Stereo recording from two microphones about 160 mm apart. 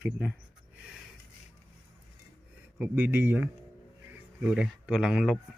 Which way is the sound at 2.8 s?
10° right (ahead or behind).